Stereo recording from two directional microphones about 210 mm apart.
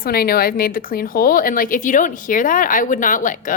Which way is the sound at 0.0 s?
45° left (ahead or behind).